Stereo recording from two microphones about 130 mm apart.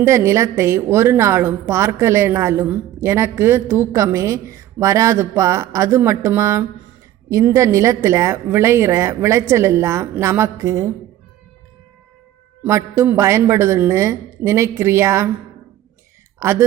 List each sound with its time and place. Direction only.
0.0 s a woman's voice: 20° right (ahead or behind)
12.6 s a woman's voice: 20° right (ahead or behind)
16.4 s a woman's voice: 20° right (ahead or behind)